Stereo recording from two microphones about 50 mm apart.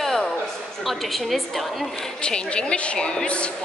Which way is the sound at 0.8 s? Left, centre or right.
Centre.